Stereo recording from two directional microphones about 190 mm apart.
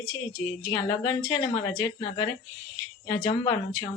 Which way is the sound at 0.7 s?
20° left (ahead or behind).